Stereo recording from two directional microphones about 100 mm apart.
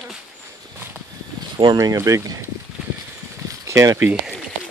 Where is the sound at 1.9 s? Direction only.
35° right (ahead or behind).